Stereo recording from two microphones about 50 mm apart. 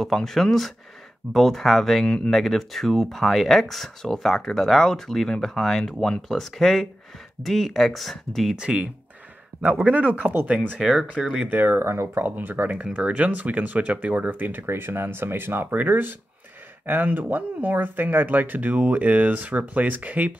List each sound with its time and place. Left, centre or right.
0.0 s speech: centre
2.0 s speech: centre
2.3 s speech: centre
6.2 s speech: centre
8.5 s speech: centre
9.8 s speech: right
10.8 s speech: centre
11.4 s speech: right
11.8 s speech: right
12.2 s speech: right
14.3 s speech: right